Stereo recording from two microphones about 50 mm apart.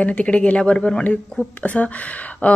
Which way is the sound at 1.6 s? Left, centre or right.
Left.